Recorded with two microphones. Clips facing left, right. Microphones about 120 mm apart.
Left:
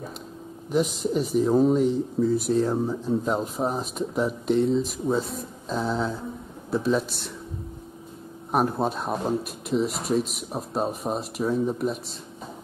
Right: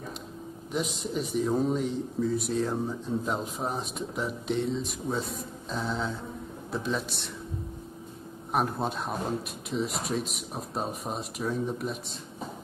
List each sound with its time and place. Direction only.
0.7 s speech: centre (ahead or behind)
2.7 s speech: 30° left (ahead or behind)
3.3 s speech: centre (ahead or behind)
8.5 s speech: centre (ahead or behind)